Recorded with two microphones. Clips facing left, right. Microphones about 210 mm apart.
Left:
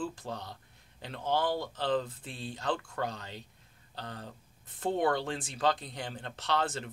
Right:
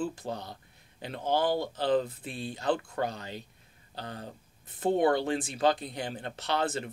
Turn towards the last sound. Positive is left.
turn(degrees=-10)  # may be behind; listen again after turning